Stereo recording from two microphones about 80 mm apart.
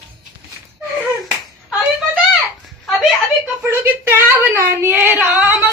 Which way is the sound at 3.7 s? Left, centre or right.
Right.